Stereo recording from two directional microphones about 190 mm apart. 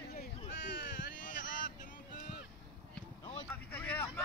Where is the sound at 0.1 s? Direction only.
50° left (ahead or behind).